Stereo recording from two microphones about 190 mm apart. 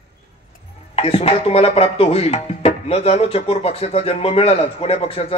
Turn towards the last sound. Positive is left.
turn(degrees=30)  # may be behind; listen again after turning